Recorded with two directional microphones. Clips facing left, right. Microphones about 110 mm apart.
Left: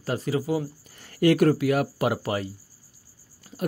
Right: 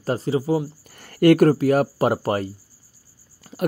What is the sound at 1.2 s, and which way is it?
Speech, 50° right (ahead or behind).